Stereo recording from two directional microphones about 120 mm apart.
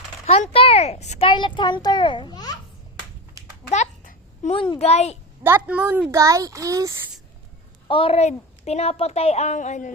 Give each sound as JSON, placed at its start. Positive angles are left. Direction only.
{"t": 0.3, "sound": "a woman's voice", "side_deg": 55}
{"t": 1.3, "sound": "a child's voice", "side_deg": 40}
{"t": 4.4, "sound": "a woman's voice", "side_deg": 50}
{"t": 5.4, "sound": "a woman's voice", "side_deg": -15}
{"t": 6.1, "sound": "a child's voice", "side_deg": -25}
{"t": 7.9, "sound": "a woman's voice", "side_deg": 50}
{"t": 8.2, "sound": "a woman's voice", "side_deg": 65}